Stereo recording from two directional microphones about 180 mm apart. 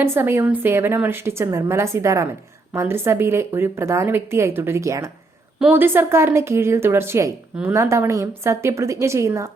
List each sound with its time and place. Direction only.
0.0 s speech: 15° right (ahead or behind)